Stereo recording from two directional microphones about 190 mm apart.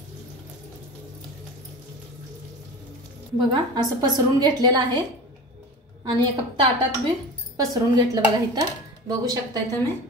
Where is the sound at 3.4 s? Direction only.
20° right (ahead or behind).